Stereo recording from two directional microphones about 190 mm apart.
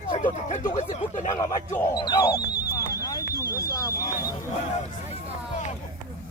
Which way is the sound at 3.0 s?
20° left (ahead or behind).